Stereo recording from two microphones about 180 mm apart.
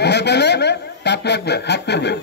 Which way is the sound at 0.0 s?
70° left (ahead or behind).